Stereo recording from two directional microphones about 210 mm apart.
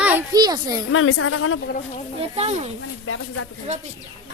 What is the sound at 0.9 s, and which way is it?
Speech, 85° left.